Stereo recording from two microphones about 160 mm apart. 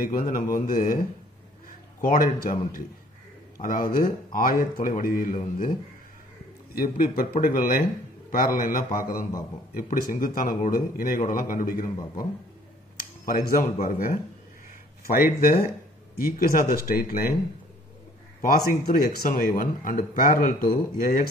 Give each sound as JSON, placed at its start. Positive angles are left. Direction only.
{"t": 0.0, "sound": "a man's voice", "side_deg": 65}
{"t": 6.7, "sound": "a man's voice", "side_deg": 65}
{"t": 12.9, "sound": "a man's voice", "side_deg": 65}
{"t": 18.4, "sound": "a man's voice", "side_deg": 65}